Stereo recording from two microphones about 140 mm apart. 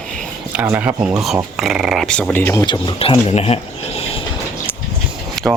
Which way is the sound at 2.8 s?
40° left (ahead or behind).